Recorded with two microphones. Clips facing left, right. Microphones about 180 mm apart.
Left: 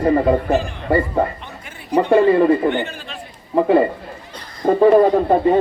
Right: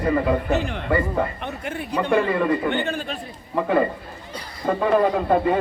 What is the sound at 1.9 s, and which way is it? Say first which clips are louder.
A man's voice: left 8 dB; 30° left (ahead or behind).